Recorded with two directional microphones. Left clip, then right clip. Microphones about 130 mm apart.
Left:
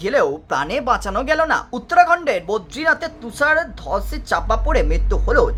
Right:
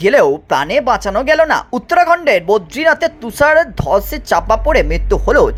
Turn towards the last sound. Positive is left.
turn(degrees=-35)  # may be behind; listen again after turning